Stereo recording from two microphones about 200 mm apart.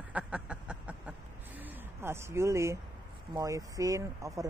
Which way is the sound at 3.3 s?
15° right (ahead or behind).